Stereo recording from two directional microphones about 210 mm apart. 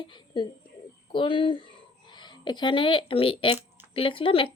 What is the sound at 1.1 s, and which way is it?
Speech, 25° left (ahead or behind).